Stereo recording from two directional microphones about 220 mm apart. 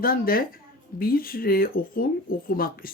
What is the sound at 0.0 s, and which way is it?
Speech, 40° left (ahead or behind).